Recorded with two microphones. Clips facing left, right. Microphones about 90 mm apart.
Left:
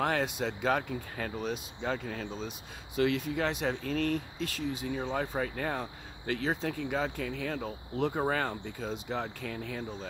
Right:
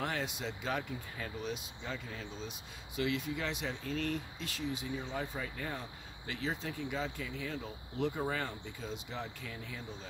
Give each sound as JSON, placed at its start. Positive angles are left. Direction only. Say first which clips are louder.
{"t": 0.0, "sound": "speech", "louder": "left 7 dB", "side_deg": 55}